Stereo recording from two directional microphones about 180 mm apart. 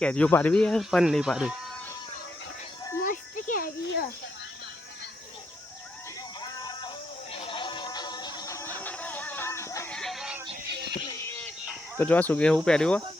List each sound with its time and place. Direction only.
0.0 s speech: 5° left (ahead or behind)
3.0 s a sound: 50° left (ahead or behind)
6.4 s music: 20° left (ahead or behind)
9.9 s a sound: centre (ahead or behind)
10.7 s music: 70° right (ahead or behind)
11.9 s speech: 10° left (ahead or behind)